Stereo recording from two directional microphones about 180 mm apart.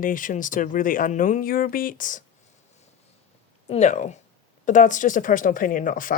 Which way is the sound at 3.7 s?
40° left (ahead or behind).